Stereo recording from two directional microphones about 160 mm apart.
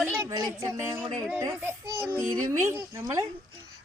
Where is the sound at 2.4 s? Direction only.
20° right (ahead or behind).